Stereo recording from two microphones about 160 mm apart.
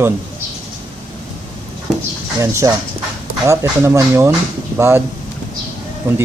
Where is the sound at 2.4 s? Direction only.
20° right (ahead or behind).